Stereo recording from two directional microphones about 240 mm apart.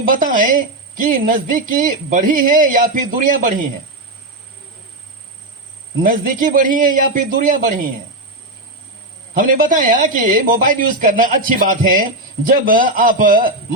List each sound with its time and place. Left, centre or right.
0.0 s speech: right
6.0 s speech: right
9.3 s speech: right